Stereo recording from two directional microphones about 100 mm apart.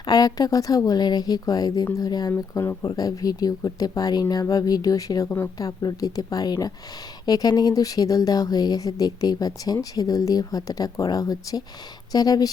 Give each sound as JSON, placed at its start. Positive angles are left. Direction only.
{"t": 0.0, "sound": "speech", "side_deg": 40}
{"t": 2.3, "sound": "speech", "side_deg": 25}
{"t": 2.8, "sound": "speech", "side_deg": 40}